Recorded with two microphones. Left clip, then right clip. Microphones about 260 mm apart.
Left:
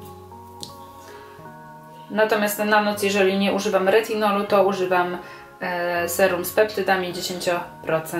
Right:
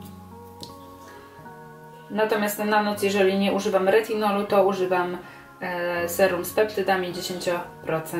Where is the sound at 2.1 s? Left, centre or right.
Centre.